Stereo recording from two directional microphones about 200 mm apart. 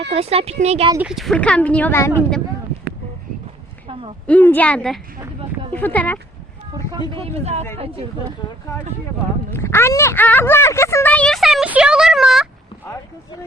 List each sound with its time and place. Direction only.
0.1 s speech: 30° right (ahead or behind)
1.0 s speech: centre (ahead or behind)
4.3 s speech: 10° left (ahead or behind)
7.1 s speech: 30° right (ahead or behind)
9.5 s a woman's voice: 10° left (ahead or behind)